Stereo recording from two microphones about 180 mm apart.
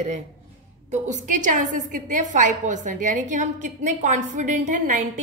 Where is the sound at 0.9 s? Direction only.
45° right (ahead or behind).